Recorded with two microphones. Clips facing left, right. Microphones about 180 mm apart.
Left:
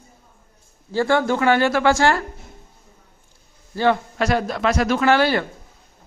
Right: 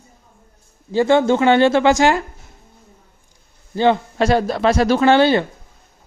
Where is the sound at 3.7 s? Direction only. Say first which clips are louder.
Right 3 dB; 25° right (ahead or behind).